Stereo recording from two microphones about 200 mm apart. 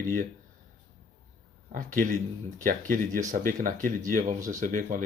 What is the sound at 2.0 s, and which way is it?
Speech, 40° right (ahead or behind).